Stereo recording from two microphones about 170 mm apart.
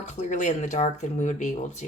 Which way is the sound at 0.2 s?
45° left (ahead or behind).